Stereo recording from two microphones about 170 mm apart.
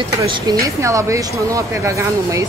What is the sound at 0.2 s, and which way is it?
Speech, 20° right (ahead or behind).